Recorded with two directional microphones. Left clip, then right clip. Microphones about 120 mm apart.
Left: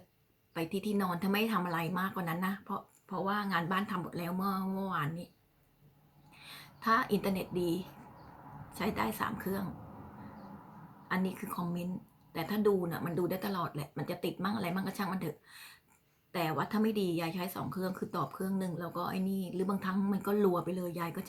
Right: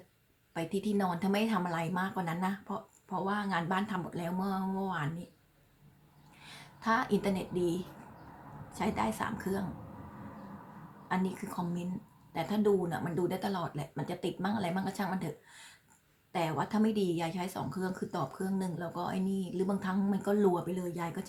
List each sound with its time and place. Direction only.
0.5 s a woman's voice: 25° right (ahead or behind)
6.4 s a woman's voice: 25° right (ahead or behind)
11.1 s a woman's voice: 25° right (ahead or behind)